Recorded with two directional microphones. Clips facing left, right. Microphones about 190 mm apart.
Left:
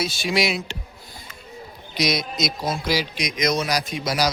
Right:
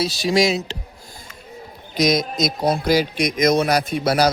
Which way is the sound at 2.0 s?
45° right (ahead or behind).